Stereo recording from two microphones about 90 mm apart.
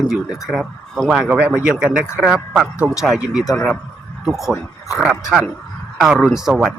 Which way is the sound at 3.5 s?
10° left (ahead or behind).